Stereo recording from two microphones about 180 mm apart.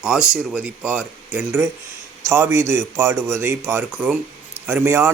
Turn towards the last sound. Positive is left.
turn(degrees=-10)  # may be behind; listen again after turning